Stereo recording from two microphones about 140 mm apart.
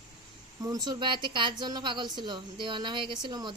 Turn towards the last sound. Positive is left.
turn(degrees=-35)  # may be behind; listen again after turning